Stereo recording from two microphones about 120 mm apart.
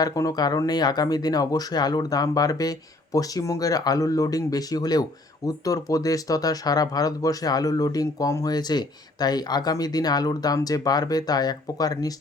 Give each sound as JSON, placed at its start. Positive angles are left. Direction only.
{"t": 0.0, "sound": "speech", "side_deg": 30}